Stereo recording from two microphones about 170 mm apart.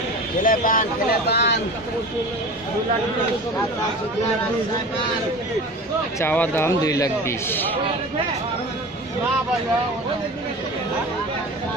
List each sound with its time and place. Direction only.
0.4 s speech: 55° left (ahead or behind)
1.3 s speech: 80° left
6.1 s a man's voice: 10° left (ahead or behind)